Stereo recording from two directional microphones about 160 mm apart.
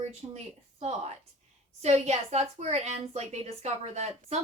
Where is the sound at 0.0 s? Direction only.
40° right (ahead or behind).